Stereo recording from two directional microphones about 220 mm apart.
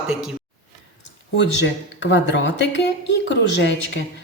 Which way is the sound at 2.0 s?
55° left (ahead or behind).